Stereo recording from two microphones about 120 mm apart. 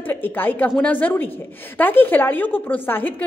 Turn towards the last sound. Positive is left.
turn(degrees=15)  # may be behind; listen again after turning